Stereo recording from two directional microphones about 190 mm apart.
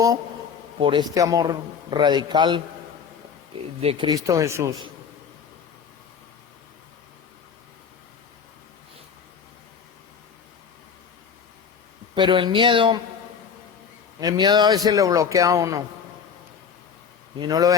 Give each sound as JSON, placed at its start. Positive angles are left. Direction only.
{"t": 0.8, "sound": "a man's voice", "side_deg": -25}
{"t": 3.8, "sound": "a man's voice", "side_deg": -30}
{"t": 12.1, "sound": "a man's voice", "side_deg": -25}
{"t": 14.2, "sound": "a man's voice", "side_deg": -20}
{"t": 17.4, "sound": "a man's voice", "side_deg": -20}